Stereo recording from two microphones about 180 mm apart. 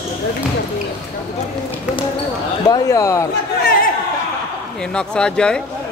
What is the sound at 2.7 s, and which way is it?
Speech, 20° left (ahead or behind).